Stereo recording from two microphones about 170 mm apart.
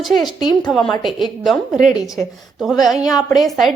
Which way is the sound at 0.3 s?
25° left (ahead or behind).